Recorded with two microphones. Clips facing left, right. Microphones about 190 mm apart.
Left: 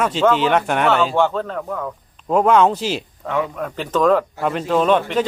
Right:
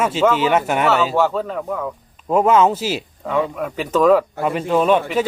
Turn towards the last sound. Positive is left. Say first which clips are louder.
# even
turn(degrees=-5)  # may be behind; listen again after turning